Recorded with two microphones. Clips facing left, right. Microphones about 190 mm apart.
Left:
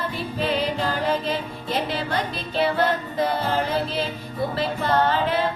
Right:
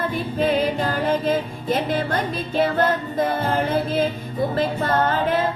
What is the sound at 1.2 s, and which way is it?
Music, 50° right (ahead or behind).